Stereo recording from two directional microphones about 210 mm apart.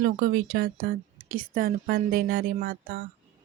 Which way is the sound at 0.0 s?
45° right (ahead or behind).